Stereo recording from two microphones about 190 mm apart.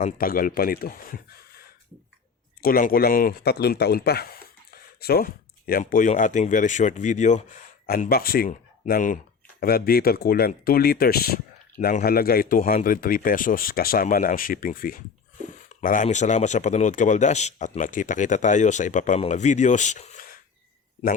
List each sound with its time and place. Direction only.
0.0 s speech: 50° left (ahead or behind)
2.6 s speech: 50° left (ahead or behind)